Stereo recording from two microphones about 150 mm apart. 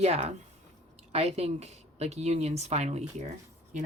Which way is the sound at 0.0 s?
45° right (ahead or behind).